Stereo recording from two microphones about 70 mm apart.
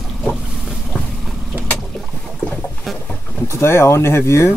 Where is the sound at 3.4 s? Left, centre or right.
Left.